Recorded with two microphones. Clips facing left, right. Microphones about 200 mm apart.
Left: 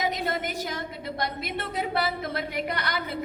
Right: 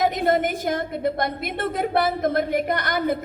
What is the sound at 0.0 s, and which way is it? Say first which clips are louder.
A woman's voice: right 8 dB; 50° right (ahead or behind).